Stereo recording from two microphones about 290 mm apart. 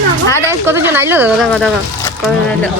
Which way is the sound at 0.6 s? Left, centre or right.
Centre.